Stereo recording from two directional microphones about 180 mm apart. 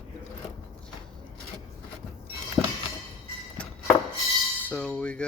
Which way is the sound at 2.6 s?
5° left (ahead or behind).